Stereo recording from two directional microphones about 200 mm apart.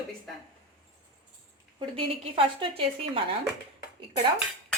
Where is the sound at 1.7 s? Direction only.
25° right (ahead or behind).